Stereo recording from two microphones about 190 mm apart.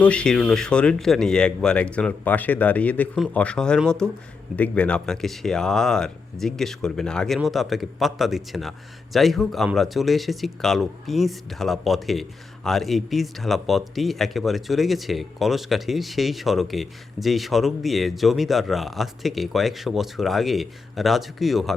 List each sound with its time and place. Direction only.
0.0 s speech: 5° left (ahead or behind)